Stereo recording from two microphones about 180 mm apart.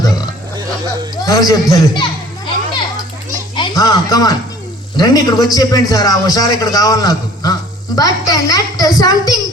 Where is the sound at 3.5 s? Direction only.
25° left (ahead or behind).